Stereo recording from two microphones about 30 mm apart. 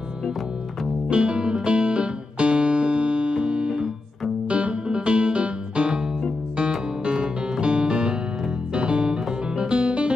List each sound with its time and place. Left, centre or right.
1.1 s music: right
7.6 s music: right